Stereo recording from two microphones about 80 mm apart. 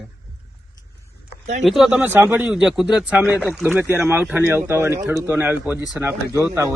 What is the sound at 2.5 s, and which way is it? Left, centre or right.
Speech, centre.